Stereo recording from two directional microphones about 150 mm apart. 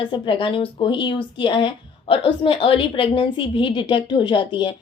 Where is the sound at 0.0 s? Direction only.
35° left (ahead or behind).